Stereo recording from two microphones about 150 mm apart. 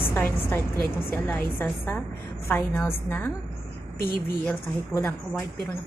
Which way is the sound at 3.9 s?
75° left (ahead or behind).